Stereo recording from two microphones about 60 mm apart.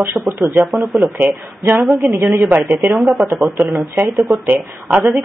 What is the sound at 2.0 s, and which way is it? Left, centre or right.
Speech, centre.